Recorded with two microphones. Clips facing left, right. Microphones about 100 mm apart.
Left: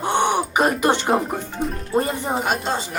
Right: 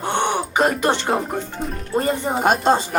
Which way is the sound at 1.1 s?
5° left (ahead or behind).